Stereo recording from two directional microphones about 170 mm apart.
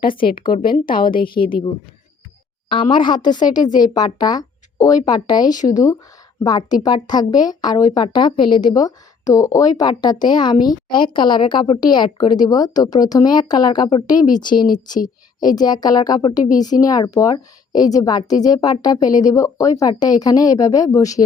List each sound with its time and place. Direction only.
0.4 s speech: 30° left (ahead or behind)
0.7 s a woman's voice: 55° left (ahead or behind)
2.6 s speech: 30° left (ahead or behind)